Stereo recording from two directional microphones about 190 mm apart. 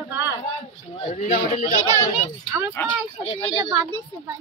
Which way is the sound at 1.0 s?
40° left (ahead or behind).